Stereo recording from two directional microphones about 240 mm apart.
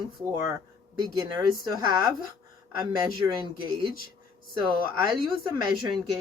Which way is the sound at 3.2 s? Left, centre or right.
Centre.